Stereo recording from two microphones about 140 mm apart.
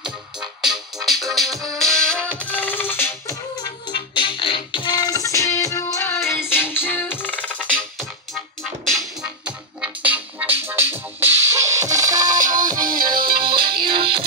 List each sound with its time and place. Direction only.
0.0 s music: 5° right (ahead or behind); by 3.3 s 15° left (ahead or behind)
3.6 s music: 35° left (ahead or behind); by 8.1 s 10° left (ahead or behind)
8.8 s music: centre (ahead or behind); by 12.4 s 25° right (ahead or behind)
12.4 s music: 70° right (ahead or behind)
12.8 s music: 90° right
13.4 s music: 35° right (ahead or behind)